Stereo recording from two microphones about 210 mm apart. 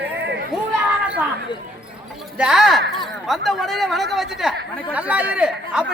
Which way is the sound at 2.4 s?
Centre (ahead or behind).